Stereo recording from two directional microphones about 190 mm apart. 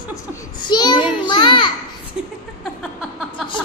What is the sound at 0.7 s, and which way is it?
A child's voice, 25° left (ahead or behind).